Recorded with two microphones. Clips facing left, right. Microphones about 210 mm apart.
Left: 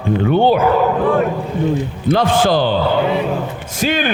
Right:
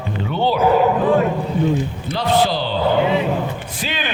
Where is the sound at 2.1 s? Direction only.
50° left (ahead or behind).